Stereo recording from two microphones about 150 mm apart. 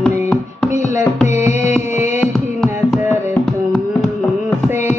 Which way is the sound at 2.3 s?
5° left (ahead or behind).